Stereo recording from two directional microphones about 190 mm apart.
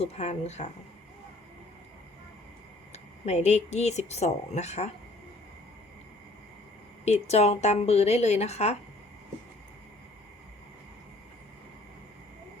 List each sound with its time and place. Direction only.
0.0 s a woman's voice: 35° left (ahead or behind)
2.9 s a woman's voice: 35° left (ahead or behind)
7.0 s a woman's voice: 35° left (ahead or behind)